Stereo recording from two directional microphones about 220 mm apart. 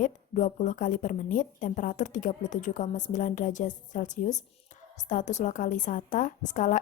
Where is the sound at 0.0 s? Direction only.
35° left (ahead or behind).